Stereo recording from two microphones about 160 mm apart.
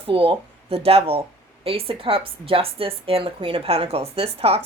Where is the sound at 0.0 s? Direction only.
35° right (ahead or behind).